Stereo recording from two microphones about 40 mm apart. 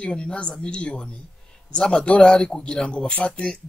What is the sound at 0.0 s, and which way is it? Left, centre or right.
A man's voice, left.